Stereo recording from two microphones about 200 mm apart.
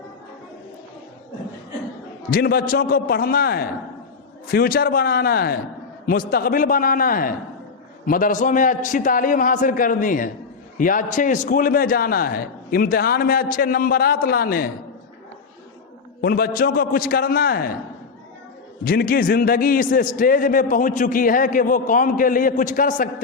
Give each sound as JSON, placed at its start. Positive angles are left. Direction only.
{"t": 2.3, "sound": "a man's voice", "side_deg": 50}
{"t": 16.2, "sound": "a man's voice", "side_deg": 50}
{"t": 18.9, "sound": "a man's voice", "side_deg": 45}